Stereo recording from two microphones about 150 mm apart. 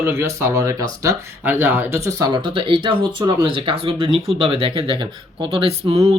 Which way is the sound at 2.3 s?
35° right (ahead or behind).